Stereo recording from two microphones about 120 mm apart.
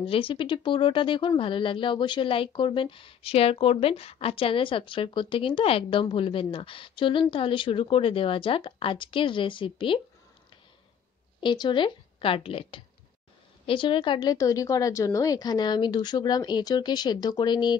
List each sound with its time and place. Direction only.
0.0 s speech: 50° left (ahead or behind)
11.4 s speech: 40° left (ahead or behind)
14.3 s a woman's voice: 30° left (ahead or behind)